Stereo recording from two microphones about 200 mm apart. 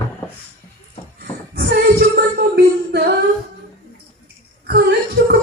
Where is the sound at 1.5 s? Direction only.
55° right (ahead or behind).